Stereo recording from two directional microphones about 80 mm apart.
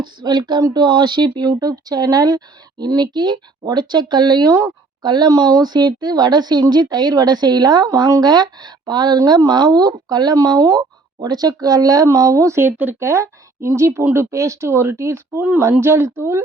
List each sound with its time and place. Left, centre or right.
0.0 s speech: right
12.5 s speech: right